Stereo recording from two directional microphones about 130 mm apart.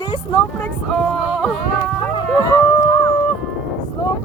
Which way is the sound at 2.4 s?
20° left (ahead or behind).